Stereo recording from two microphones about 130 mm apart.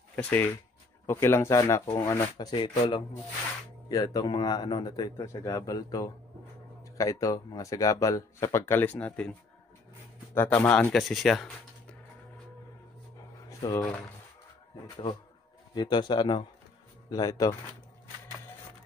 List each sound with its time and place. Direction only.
0.1 s speech: 15° left (ahead or behind)
2.5 s a man's voice: 45° left (ahead or behind)
3.9 s speech: 30° left (ahead or behind); by 9.3 s 10° left (ahead or behind)
10.3 s speech: 15° left (ahead or behind)
13.5 s speech: 30° left (ahead or behind)
15.7 s a man's voice: 35° left (ahead or behind)